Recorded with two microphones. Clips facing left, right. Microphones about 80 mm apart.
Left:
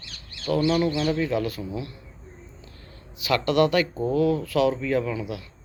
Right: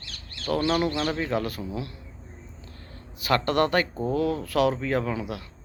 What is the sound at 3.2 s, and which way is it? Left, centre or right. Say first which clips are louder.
Speech: left 2 dB; right.